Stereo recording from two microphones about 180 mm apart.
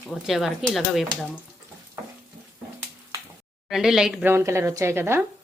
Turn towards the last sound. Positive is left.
turn(degrees=-15)  # may be behind; listen again after turning